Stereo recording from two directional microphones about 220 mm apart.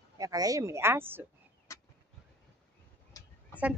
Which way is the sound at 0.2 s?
15° right (ahead or behind).